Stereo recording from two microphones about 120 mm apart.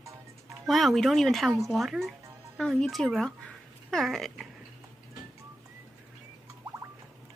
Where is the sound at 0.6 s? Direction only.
Centre (ahead or behind).